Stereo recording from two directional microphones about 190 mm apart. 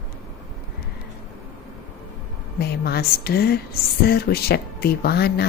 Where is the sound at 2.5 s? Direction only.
55° left (ahead or behind).